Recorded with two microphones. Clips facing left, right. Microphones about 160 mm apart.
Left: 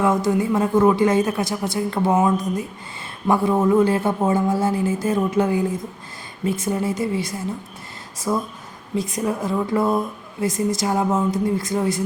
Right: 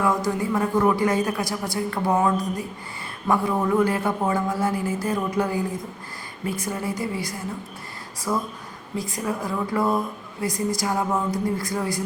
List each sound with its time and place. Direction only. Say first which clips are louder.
0.0 s a man's voice: left 4 dB; 20° left (ahead or behind)